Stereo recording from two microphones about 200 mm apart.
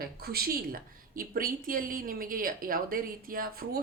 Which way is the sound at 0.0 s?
50° right (ahead or behind).